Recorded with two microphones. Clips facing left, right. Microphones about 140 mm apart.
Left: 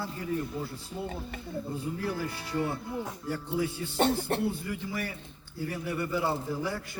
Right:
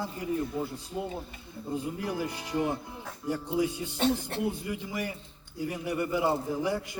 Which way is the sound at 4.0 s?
60° left (ahead or behind).